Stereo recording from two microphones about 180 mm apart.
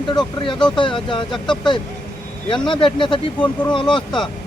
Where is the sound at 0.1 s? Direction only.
25° left (ahead or behind).